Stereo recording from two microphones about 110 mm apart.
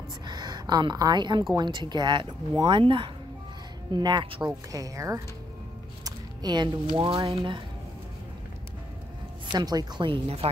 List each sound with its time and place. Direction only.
0.3 s speech: 40° right (ahead or behind)
4.7 s speech: 30° right (ahead or behind)
6.0 s speech: 40° right (ahead or behind)
9.5 s speech: 40° right (ahead or behind); by 10.5 s 60° right (ahead or behind)